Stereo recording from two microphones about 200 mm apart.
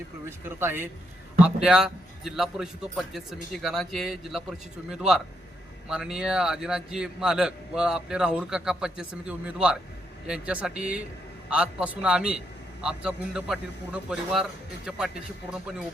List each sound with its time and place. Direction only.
0.3 s a man's voice: 10° right (ahead or behind)